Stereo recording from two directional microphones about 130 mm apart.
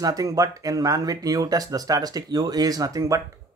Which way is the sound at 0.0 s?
30° right (ahead or behind).